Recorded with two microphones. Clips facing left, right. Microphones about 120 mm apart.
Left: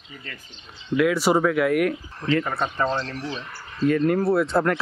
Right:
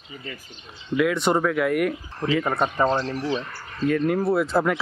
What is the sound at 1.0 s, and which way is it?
Speech, centre (ahead or behind).